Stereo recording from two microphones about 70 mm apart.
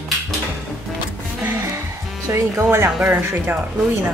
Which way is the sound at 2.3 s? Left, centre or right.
Right.